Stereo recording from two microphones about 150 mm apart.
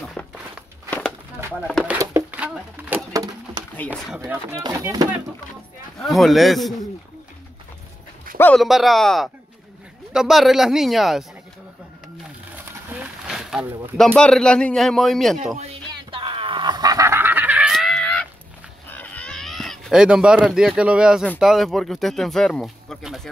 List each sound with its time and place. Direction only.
0.2 s walk: 10° left (ahead or behind)
0.8 s a sound: 10° left (ahead or behind)
2.3 s a sound: 10° right (ahead or behind)
3.1 s a sound: 25° right (ahead or behind)
4.3 s speech: 15° right (ahead or behind)
5.9 s speech: centre (ahead or behind)
8.5 s speech: centre (ahead or behind)
12.5 s pigeon: 10° right (ahead or behind)
13.9 s speech: 5° left (ahead or behind)
15.9 s a sound: 35° right (ahead or behind); by 17.7 s 10° right (ahead or behind)
17.7 s cat: centre (ahead or behind)
21.4 s speech: centre (ahead or behind)